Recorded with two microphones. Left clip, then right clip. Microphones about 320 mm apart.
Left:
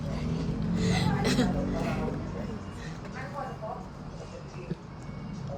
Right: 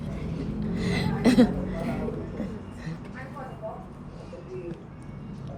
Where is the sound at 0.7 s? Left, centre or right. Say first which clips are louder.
Even; right.